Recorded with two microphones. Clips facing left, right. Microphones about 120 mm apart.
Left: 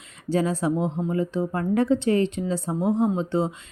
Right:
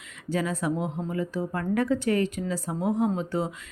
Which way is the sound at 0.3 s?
30° left (ahead or behind).